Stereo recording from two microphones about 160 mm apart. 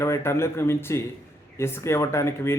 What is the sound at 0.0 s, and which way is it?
Speech, 15° left (ahead or behind).